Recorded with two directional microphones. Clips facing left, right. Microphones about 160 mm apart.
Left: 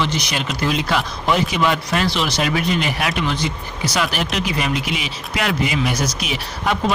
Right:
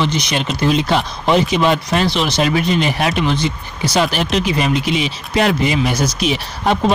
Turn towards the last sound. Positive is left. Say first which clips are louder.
# right 4 dB
turn(degrees=-30)  # may be behind; listen again after turning